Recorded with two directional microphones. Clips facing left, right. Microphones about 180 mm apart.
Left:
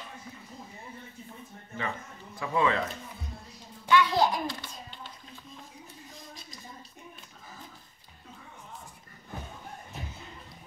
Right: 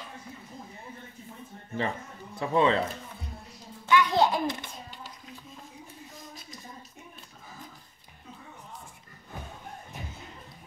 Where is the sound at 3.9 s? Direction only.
20° right (ahead or behind).